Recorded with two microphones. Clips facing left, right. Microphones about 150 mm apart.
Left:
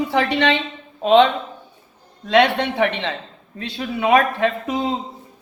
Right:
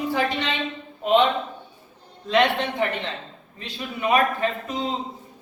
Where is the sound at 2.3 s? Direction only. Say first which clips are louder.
Left 4 dB; 80° left.